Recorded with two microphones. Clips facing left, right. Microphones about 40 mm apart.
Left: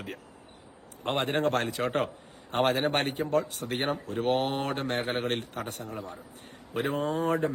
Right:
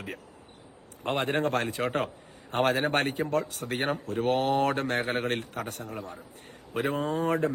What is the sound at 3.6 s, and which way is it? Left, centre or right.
Speech, right.